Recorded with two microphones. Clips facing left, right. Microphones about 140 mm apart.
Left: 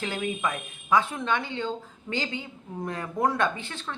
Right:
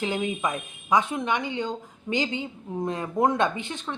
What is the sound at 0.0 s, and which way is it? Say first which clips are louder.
Speech: right 2 dB; 20° right (ahead or behind).